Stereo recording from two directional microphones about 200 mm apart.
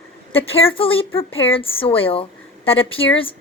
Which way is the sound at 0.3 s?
30° left (ahead or behind).